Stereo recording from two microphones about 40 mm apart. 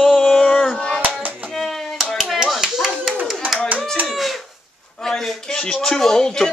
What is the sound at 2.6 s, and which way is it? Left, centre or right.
Clapping, centre.